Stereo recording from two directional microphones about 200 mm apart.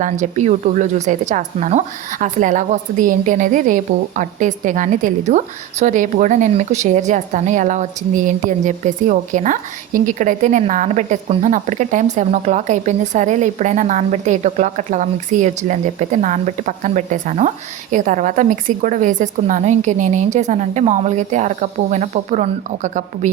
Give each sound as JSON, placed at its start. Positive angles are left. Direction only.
{"t": 0.0, "sound": "a woman's voice", "side_deg": -35}